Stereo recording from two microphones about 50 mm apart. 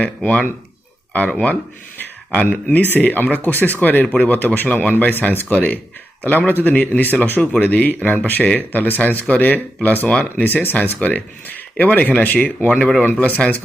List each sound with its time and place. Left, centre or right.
0.2 s speech: left
12.6 s speech: left